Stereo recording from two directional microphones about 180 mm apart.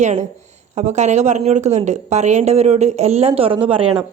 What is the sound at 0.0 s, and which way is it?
Speech, 40° right (ahead or behind).